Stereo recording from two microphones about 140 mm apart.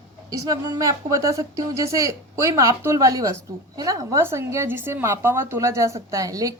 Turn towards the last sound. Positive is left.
turn(degrees=-25)  # may be behind; listen again after turning